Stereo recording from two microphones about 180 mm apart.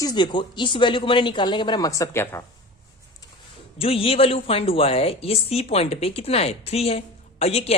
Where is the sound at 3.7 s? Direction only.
30° left (ahead or behind).